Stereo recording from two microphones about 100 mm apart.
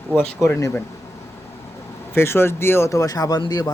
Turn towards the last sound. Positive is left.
turn(degrees=40)  # may be behind; listen again after turning